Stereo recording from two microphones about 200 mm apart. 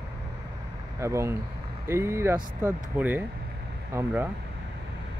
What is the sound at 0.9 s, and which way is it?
Speech, 15° right (ahead or behind).